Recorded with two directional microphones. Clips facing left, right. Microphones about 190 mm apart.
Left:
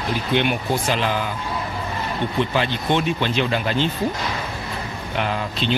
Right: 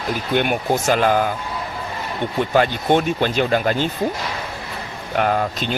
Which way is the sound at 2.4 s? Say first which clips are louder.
Right 6 dB; 45° right (ahead or behind).